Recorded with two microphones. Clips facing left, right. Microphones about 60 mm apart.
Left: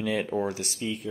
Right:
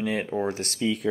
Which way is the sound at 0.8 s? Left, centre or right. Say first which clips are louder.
Right 6 dB; right.